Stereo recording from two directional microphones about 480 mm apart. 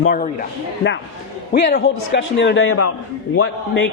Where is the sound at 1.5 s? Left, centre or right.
Centre.